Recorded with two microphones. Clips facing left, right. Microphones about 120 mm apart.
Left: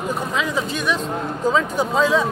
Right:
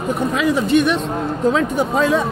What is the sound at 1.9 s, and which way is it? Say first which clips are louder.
Speech: right 1 dB; 60° right (ahead or behind).